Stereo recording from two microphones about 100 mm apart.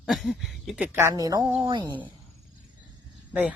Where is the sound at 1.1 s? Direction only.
40° right (ahead or behind).